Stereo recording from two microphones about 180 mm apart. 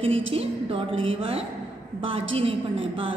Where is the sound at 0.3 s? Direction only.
30° right (ahead or behind).